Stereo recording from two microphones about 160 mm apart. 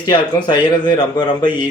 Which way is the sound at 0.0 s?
30° left (ahead or behind).